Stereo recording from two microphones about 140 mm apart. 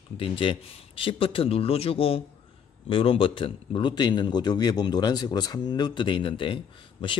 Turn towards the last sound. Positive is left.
turn(degrees=35)  # may be behind; listen again after turning